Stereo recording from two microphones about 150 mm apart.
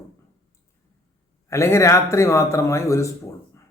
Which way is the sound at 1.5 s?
20° left (ahead or behind).